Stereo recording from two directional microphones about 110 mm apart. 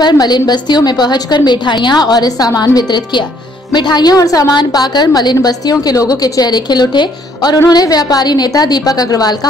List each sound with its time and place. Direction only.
0.0 s a woman's voice: 40° left (ahead or behind)